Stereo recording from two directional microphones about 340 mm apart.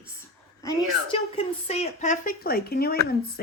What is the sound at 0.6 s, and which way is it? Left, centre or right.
A woman's voice, centre.